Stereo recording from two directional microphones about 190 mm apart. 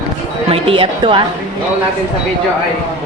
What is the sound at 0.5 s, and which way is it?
Speech, 30° right (ahead or behind).